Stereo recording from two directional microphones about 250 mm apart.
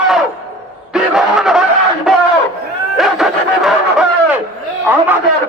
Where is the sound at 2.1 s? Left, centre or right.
Centre.